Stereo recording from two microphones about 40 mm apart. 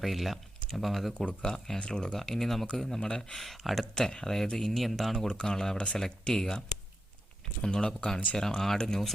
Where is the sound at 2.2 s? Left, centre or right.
Centre.